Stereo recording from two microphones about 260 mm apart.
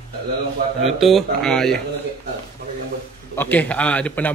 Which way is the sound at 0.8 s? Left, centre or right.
Centre.